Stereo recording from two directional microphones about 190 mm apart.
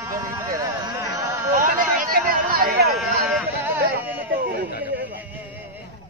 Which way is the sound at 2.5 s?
50° right (ahead or behind).